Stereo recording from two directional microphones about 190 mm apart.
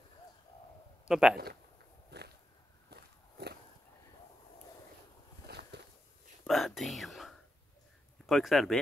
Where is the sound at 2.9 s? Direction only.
60° right (ahead or behind).